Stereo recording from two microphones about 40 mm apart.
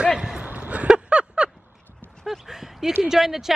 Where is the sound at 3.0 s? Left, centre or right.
Centre.